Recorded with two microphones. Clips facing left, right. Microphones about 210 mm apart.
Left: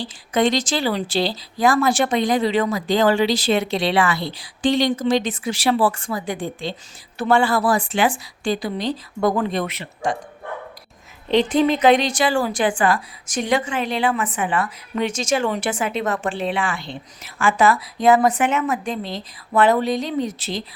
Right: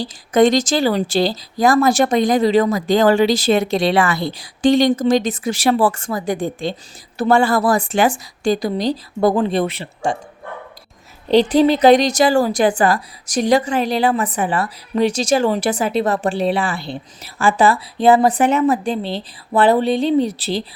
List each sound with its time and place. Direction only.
0.0 s a woman's voice: 45° right (ahead or behind)
11.3 s a woman's voice: 35° right (ahead or behind)